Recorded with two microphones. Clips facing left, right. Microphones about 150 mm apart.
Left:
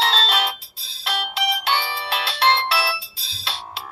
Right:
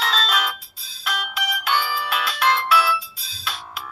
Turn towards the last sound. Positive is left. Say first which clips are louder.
# even
turn(degrees=30)  # may be behind; listen again after turning